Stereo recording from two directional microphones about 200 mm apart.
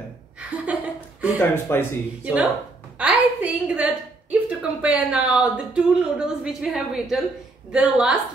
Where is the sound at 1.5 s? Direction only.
10° left (ahead or behind).